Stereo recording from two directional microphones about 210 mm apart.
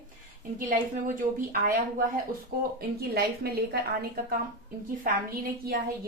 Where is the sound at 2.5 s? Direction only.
45° right (ahead or behind).